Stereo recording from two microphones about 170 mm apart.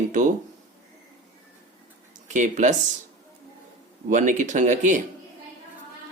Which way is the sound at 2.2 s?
45° right (ahead or behind).